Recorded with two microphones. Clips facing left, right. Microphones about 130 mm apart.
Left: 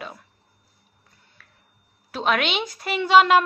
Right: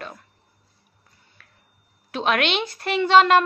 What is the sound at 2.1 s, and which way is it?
Speech, centre (ahead or behind).